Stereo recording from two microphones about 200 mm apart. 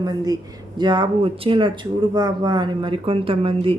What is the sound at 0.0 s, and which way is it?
Speech, 20° right (ahead or behind).